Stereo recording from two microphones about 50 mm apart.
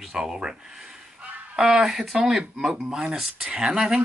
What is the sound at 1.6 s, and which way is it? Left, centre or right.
Speech, centre.